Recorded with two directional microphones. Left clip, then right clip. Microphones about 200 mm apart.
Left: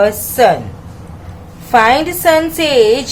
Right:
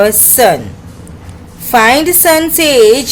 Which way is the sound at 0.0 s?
30° right (ahead or behind).